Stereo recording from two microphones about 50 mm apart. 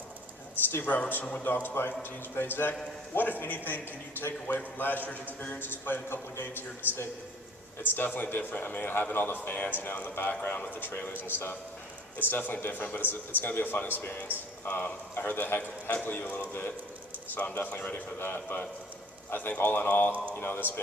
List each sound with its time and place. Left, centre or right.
0.8 s a man's voice: left
18.2 s a man's voice: left